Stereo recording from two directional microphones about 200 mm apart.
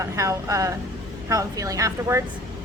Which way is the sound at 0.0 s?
15° right (ahead or behind).